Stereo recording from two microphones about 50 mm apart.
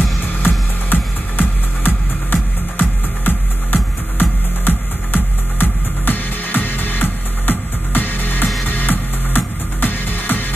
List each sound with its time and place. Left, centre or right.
0.2 s music: left